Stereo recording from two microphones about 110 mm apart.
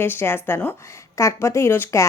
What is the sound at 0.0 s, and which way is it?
A woman's voice, 20° left (ahead or behind).